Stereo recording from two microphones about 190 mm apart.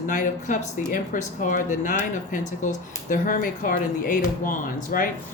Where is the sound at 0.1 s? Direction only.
40° left (ahead or behind).